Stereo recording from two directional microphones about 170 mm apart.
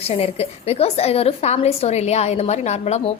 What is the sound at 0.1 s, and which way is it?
A woman's voice, 35° left (ahead or behind).